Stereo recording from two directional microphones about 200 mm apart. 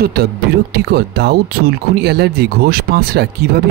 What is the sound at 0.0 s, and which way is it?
Speech, 50° right (ahead or behind).